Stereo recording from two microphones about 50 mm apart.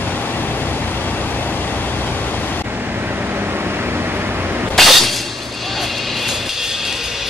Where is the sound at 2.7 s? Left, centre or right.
Right.